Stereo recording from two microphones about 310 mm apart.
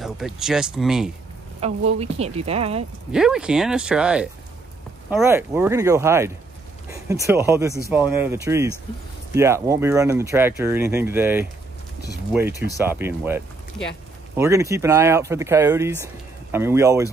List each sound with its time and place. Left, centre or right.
0.0 s speech: centre
1.6 s speech: centre
3.1 s speech: centre